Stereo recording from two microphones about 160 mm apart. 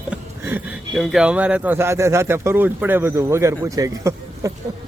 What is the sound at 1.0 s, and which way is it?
Speech, 5° right (ahead or behind).